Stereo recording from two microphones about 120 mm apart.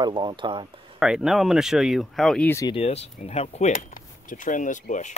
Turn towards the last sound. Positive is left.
turn(degrees=90)